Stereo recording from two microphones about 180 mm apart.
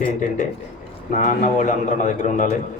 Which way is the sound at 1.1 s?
40° left (ahead or behind).